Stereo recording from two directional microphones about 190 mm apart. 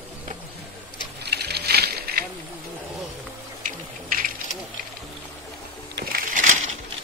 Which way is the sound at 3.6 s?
45° right (ahead or behind).